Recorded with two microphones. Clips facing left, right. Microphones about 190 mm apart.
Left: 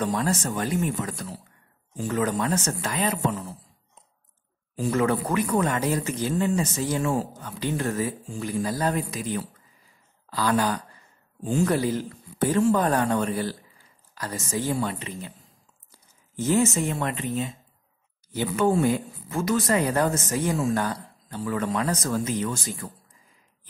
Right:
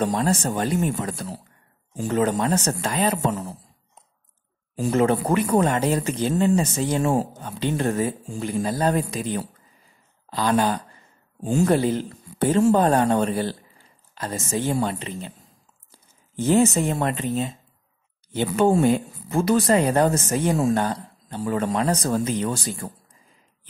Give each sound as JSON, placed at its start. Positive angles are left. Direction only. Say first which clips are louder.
{"t": 0.0, "sound": "a man's voice", "louder": "right 3 dB", "side_deg": -25}
{"t": 4.9, "sound": "speech", "louder": "right 4 dB", "side_deg": -25}
{"t": 7.0, "sound": "a man's voice", "louder": "right 4 dB", "side_deg": -40}
{"t": 7.3, "sound": "a man's voice", "louder": "right 3 dB", "side_deg": -25}